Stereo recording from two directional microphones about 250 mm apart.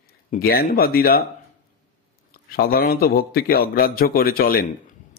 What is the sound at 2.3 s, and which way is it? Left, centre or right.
A man's voice, left.